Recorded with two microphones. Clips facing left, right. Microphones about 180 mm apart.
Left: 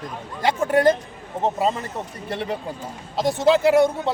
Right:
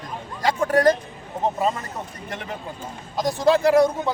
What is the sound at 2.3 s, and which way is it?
Speech, 30° left (ahead or behind).